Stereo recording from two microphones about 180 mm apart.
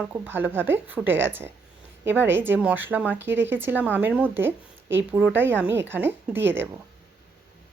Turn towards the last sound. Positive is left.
turn(degrees=-10)  # may be behind; listen again after turning